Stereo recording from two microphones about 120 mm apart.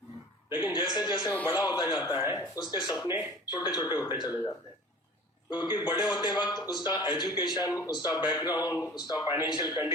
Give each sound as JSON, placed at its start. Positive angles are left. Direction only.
{"t": 0.5, "sound": "a man's voice", "side_deg": 35}
{"t": 5.5, "sound": "a man's voice", "side_deg": 35}